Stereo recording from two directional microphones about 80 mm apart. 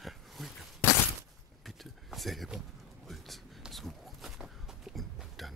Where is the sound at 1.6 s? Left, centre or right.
Centre.